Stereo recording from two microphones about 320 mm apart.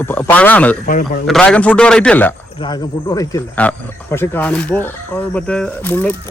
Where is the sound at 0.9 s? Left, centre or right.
Left.